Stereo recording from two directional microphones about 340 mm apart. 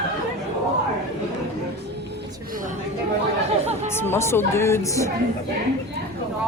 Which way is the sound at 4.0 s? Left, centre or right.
Centre.